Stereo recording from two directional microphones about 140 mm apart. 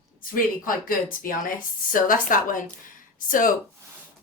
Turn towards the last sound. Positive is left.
turn(degrees=70)  # may be behind; listen again after turning